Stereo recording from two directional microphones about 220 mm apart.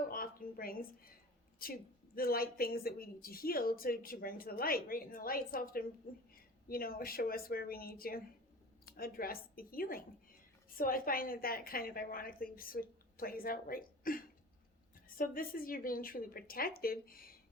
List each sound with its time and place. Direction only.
0.1 s a woman's voice: 40° left (ahead or behind)